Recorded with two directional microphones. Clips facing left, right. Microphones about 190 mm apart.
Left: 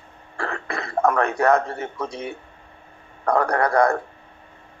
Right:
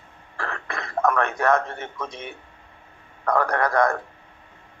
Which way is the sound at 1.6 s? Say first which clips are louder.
Left 4 dB; 30° left (ahead or behind).